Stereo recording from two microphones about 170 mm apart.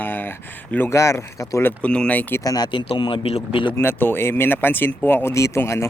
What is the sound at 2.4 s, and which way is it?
Speech, 25° left (ahead or behind).